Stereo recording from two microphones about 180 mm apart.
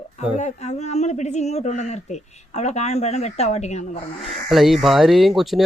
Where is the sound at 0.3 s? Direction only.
40° left (ahead or behind).